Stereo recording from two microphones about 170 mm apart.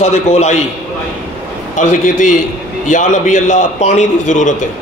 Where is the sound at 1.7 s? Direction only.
50° left (ahead or behind).